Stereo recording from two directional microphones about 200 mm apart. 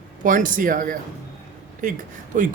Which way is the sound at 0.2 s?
40° right (ahead or behind).